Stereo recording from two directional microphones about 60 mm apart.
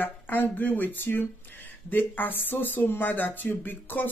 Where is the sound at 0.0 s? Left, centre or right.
Left.